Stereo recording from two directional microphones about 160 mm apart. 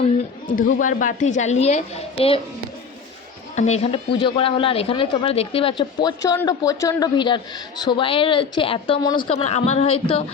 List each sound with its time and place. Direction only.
0.4 s a woman's voice: 55° left (ahead or behind); by 2.4 s 35° left (ahead or behind)
3.5 s a woman's voice: 45° left (ahead or behind)
4.2 s speech: 35° left (ahead or behind)